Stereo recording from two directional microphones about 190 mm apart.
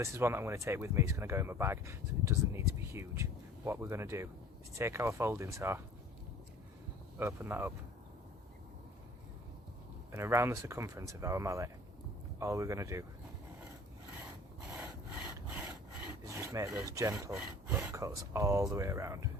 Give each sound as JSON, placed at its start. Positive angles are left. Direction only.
{"t": 0.0, "sound": "speech", "side_deg": -15}
{"t": 7.2, "sound": "speech", "side_deg": -10}
{"t": 10.1, "sound": "speech", "side_deg": -15}
{"t": 15.4, "sound": "wood", "side_deg": -10}
{"t": 16.2, "sound": "rub", "side_deg": -15}
{"t": 17.3, "sound": "speech", "side_deg": -10}